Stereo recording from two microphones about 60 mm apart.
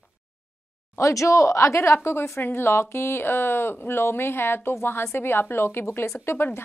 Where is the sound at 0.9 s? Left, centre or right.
Left.